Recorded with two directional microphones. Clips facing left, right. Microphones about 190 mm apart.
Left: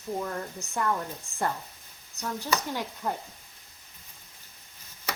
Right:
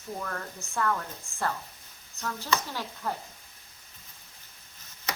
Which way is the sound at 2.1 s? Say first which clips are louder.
Even; 20° left (ahead or behind).